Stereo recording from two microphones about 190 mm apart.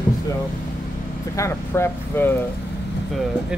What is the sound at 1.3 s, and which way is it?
Speech, 15° left (ahead or behind).